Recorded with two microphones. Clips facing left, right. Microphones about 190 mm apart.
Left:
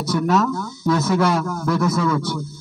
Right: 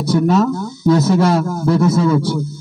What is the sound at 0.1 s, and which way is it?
A man's voice, 30° right (ahead or behind).